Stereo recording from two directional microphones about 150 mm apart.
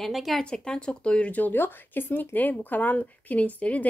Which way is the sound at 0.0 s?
Centre (ahead or behind).